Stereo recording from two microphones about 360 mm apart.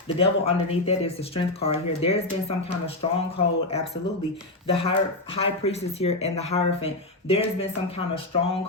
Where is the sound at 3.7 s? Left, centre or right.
Centre.